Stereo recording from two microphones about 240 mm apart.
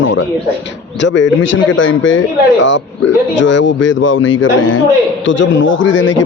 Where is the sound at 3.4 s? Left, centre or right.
Left.